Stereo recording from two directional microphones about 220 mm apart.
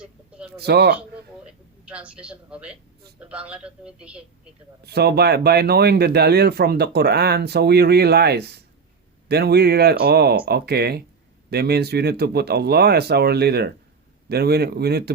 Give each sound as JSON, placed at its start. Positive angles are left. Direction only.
{"t": 0.0, "sound": "a sound", "side_deg": -5}
{"t": 0.5, "sound": "speech", "side_deg": -45}
{"t": 1.8, "sound": "speech", "side_deg": -5}
{"t": 4.8, "sound": "speech", "side_deg": -45}